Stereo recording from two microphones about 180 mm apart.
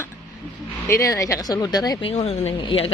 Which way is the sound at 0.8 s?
15° left (ahead or behind).